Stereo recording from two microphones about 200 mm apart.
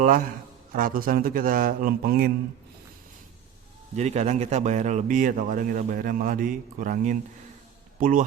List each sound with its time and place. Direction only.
0.0 s a man's voice: 45° right (ahead or behind)
3.9 s speech: 35° right (ahead or behind)